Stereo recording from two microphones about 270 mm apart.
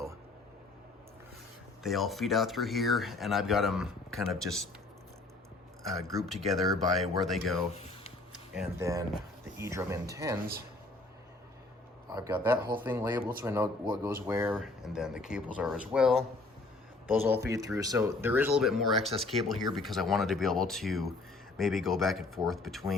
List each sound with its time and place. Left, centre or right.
1.8 s speech: centre
6.3 s speech: centre
7.7 s a sound: left
8.3 s speech: centre
12.0 s speech: centre